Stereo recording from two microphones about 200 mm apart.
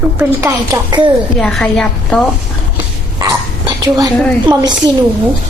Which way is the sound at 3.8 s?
15° right (ahead or behind).